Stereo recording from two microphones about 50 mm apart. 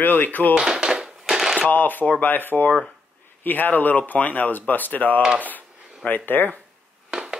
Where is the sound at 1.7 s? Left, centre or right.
Left.